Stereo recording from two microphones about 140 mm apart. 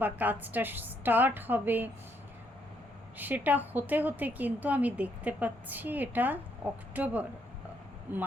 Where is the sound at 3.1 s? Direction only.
10° right (ahead or behind).